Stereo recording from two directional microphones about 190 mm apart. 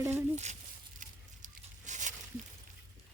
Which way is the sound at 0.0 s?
15° right (ahead or behind).